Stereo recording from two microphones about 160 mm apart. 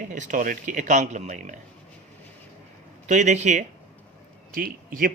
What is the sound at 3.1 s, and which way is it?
Speech, 50° right (ahead or behind).